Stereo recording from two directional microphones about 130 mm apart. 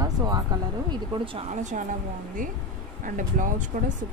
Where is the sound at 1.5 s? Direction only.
65° right (ahead or behind).